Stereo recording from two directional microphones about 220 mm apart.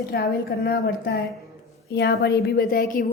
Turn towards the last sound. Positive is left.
turn(degrees=40)  # may be behind; listen again after turning